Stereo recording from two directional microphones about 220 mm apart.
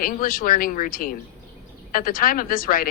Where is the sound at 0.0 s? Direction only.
40° left (ahead or behind).